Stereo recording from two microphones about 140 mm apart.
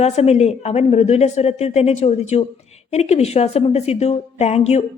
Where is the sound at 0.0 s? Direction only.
50° left (ahead or behind).